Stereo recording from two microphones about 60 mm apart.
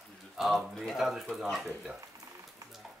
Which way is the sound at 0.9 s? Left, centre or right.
Centre.